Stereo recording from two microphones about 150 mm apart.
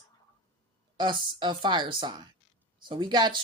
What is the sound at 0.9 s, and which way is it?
A woman's voice, 30° right (ahead or behind).